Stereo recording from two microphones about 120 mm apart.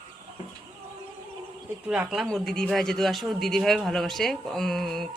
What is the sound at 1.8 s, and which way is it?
Speech, 10° right (ahead or behind).